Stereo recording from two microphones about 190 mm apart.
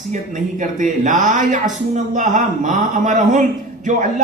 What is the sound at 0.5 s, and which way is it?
A woman's voice, 45° right (ahead or behind).